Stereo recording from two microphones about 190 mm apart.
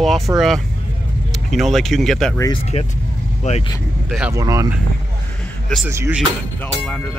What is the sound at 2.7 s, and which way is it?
Speech, 35° left (ahead or behind).